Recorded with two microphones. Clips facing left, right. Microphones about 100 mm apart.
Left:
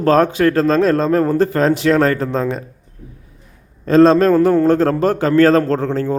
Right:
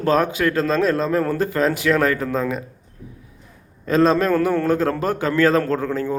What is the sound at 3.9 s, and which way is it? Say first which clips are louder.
Speech: left 7 dB; 35° left (ahead or behind).